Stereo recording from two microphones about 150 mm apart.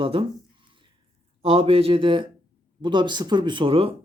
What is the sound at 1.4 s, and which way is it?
Speech, 40° right (ahead or behind).